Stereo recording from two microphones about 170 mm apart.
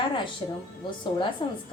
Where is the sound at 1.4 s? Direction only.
30° left (ahead or behind).